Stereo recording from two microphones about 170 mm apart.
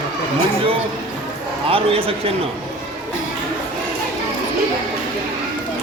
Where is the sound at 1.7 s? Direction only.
35° right (ahead or behind).